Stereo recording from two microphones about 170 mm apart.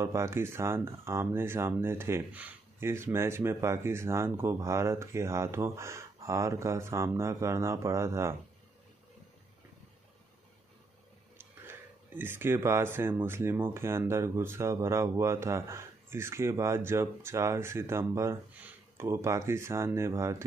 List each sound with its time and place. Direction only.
0.0 s speech: 15° right (ahead or behind)
12.2 s speech: 15° right (ahead or behind)